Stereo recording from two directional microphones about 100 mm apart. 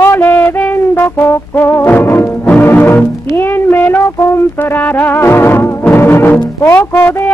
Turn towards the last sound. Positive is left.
turn(degrees=15)  # may be behind; listen again after turning